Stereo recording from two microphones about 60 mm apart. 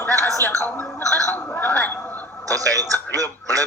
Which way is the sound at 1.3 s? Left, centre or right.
Left.